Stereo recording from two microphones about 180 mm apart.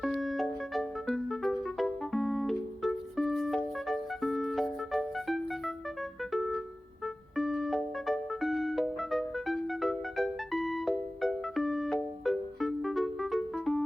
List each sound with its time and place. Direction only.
0.0 s music: centre (ahead or behind)